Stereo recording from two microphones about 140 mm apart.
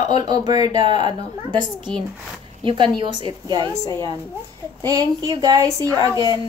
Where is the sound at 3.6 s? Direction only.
20° left (ahead or behind).